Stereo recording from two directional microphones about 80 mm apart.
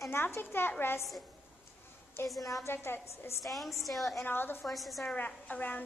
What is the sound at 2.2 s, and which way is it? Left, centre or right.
A woman's voice, left.